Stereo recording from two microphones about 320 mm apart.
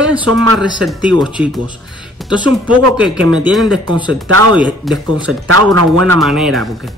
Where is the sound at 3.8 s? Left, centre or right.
Centre.